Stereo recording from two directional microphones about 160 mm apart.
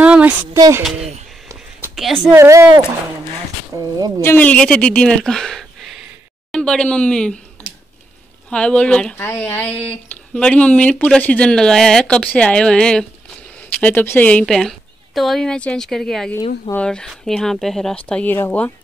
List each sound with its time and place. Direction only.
0.0 s a sound: 10° right (ahead or behind)
0.6 s speech: 20° right (ahead or behind)
2.3 s speech: 15° right (ahead or behind)
3.7 s speech: 25° right (ahead or behind)
4.2 s speech: 10° left (ahead or behind)
8.5 s a woman's voice: 5° left (ahead or behind)